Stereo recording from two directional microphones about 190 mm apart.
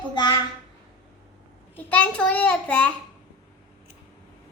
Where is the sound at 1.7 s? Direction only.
10° left (ahead or behind).